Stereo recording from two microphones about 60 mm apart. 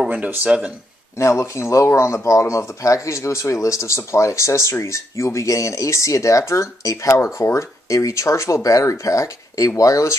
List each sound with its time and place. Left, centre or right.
0.5 s speech: centre
1.1 s speech: left